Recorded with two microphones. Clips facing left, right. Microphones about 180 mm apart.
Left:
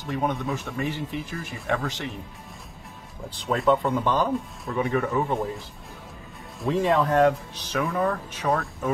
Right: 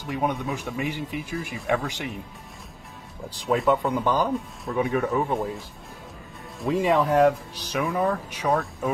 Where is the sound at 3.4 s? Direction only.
Centre (ahead or behind).